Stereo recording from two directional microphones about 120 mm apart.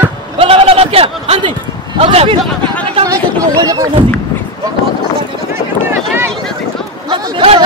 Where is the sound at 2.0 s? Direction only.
50° right (ahead or behind).